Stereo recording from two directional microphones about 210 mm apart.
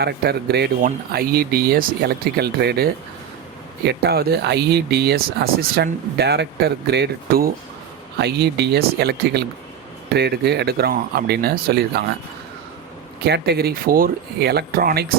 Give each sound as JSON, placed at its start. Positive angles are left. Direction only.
{"t": 0.0, "sound": "speech", "side_deg": -50}
{"t": 13.2, "sound": "speech", "side_deg": -50}